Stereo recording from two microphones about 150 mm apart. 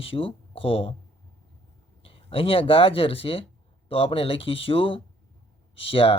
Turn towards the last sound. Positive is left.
turn(degrees=35)  # may be behind; listen again after turning